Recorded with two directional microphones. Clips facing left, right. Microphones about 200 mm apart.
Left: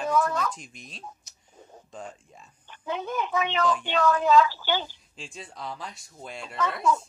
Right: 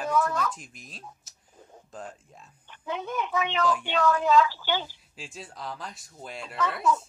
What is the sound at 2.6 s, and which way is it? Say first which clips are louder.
A woman's voice: left 2 dB; 35° left (ahead or behind).